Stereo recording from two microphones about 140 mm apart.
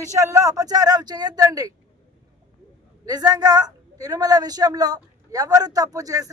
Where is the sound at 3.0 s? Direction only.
25° right (ahead or behind).